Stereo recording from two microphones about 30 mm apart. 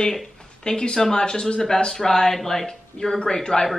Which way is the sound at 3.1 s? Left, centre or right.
Left.